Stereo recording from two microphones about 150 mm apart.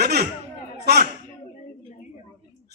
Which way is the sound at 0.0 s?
90° right.